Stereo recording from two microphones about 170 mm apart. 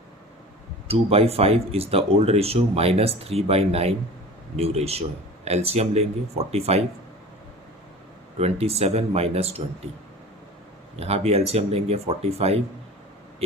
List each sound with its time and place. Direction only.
0.9 s speech: 35° right (ahead or behind)
8.4 s speech: 35° right (ahead or behind)
10.9 s speech: 35° right (ahead or behind)